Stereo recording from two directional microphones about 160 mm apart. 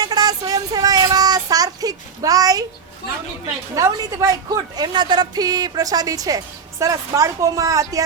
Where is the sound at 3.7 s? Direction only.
20° right (ahead or behind).